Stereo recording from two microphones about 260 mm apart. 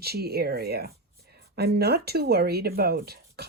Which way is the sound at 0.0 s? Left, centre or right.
Right.